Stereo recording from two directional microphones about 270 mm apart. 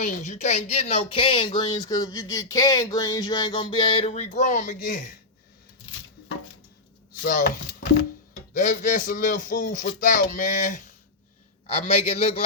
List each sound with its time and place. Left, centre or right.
0.0 s speech: left
7.3 s speech: left